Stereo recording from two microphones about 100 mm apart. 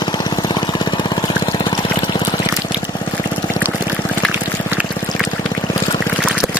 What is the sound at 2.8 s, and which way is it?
Pour, 45° left (ahead or behind).